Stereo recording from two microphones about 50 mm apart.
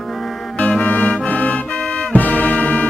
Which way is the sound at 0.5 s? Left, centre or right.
Centre.